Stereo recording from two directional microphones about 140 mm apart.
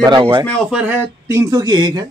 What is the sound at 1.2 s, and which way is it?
Speech, 25° right (ahead or behind).